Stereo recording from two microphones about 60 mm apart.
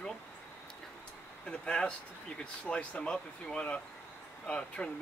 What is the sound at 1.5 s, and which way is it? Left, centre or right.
Speech, centre.